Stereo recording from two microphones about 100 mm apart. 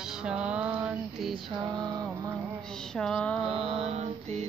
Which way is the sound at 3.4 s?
90° right.